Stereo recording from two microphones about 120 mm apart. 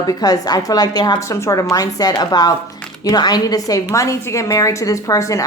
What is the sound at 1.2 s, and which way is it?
A woman's voice, 25° left (ahead or behind).